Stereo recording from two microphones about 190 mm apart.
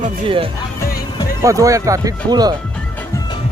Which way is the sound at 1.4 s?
15° right (ahead or behind).